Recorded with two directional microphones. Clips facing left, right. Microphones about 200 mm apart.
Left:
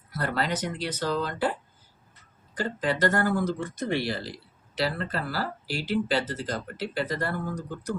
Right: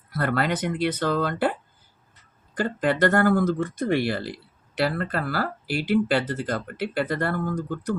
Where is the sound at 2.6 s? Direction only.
55° right (ahead or behind).